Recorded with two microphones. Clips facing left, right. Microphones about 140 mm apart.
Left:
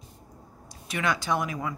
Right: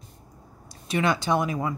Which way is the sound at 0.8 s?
25° right (ahead or behind).